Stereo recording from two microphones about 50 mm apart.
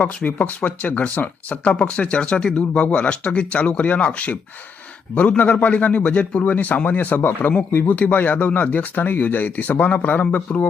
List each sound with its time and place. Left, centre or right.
0.3 s speech: left
5.4 s speech: left
7.2 s a man's voice: left
7.9 s speech: left